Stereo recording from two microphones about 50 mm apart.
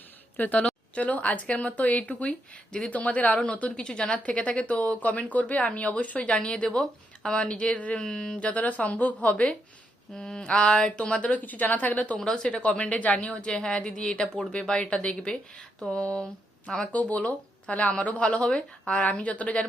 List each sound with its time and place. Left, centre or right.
0.3 s speech: left
6.7 s speech: centre
7.9 s speech: centre
8.4 s speech: left
10.2 s speech: centre; by 12.2 s left
12.2 s speech: centre
16.9 s speech: left